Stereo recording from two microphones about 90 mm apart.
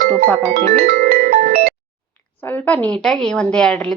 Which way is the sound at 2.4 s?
20° left (ahead or behind).